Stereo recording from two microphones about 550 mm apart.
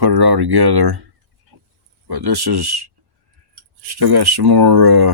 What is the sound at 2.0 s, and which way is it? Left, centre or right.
Speech, right.